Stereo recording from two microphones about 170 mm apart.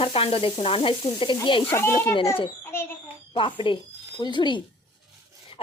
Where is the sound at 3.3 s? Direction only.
30° left (ahead or behind).